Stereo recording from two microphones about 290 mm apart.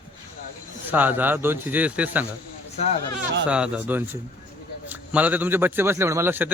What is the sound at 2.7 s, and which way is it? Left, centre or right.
Speech, left.